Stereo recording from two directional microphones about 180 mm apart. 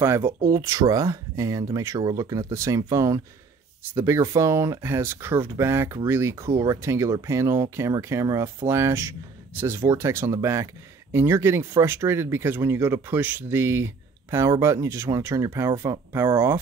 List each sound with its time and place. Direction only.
0.0 s speech: 15° right (ahead or behind)